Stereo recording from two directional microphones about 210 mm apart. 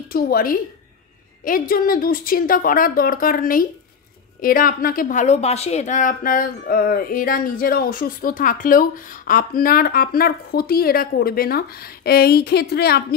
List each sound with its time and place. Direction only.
0.1 s a woman's voice: 45° left (ahead or behind)